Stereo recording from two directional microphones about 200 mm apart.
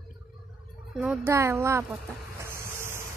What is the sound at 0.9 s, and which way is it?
Speech, 10° right (ahead or behind).